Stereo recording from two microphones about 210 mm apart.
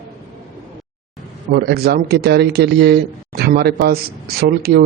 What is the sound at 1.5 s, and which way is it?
A man's voice, 50° right (ahead or behind).